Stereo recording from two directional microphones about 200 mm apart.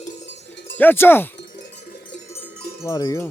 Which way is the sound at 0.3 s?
60° left (ahead or behind).